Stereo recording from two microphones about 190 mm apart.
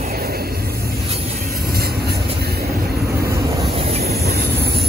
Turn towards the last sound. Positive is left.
turn(degrees=-35)  # may be behind; listen again after turning